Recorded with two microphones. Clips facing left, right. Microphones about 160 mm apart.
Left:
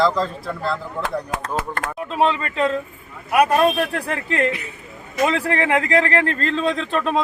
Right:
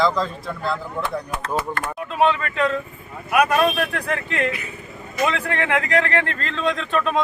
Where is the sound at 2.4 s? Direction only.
35° left (ahead or behind).